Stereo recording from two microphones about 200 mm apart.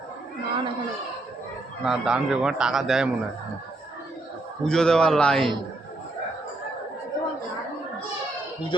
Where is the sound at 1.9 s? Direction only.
5° right (ahead or behind).